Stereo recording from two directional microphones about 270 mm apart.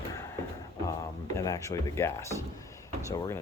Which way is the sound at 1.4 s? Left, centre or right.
Centre.